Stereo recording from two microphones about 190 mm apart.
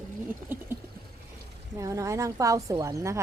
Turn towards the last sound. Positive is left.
turn(degrees=-15)  # may be behind; listen again after turning